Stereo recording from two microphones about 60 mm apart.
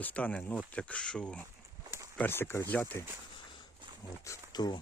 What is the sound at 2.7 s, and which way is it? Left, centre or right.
Speech, left.